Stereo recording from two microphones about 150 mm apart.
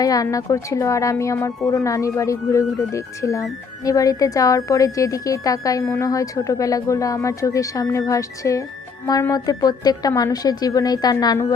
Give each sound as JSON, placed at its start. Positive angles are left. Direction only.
{"t": 0.0, "sound": "speech", "side_deg": 25}